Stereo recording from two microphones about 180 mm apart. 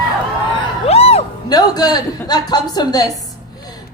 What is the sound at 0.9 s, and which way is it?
Music, 35° left (ahead or behind).